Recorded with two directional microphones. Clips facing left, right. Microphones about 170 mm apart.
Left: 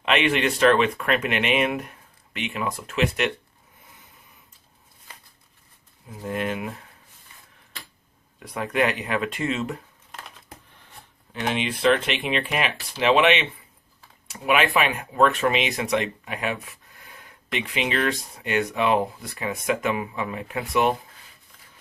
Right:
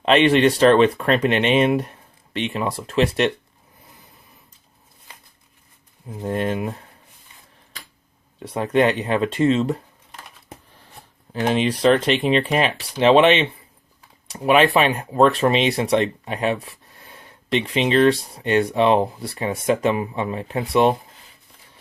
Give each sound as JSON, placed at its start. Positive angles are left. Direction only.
{"t": 0.0, "sound": "speech", "side_deg": -35}
{"t": 6.1, "sound": "speech", "side_deg": -35}
{"t": 8.4, "sound": "speech", "side_deg": -30}
{"t": 11.3, "sound": "speech", "side_deg": -35}